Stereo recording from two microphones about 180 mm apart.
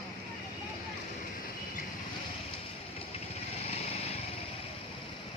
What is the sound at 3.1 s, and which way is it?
Vehicle, 35° left (ahead or behind).